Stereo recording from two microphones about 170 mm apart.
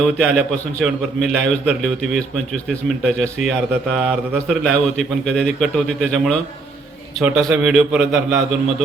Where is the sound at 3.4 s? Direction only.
50° left (ahead or behind).